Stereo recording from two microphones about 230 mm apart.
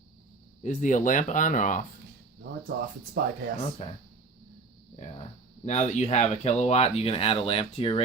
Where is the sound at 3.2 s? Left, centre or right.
Right.